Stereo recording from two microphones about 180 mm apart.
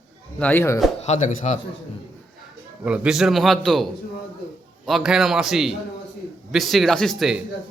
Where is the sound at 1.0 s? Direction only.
40° left (ahead or behind).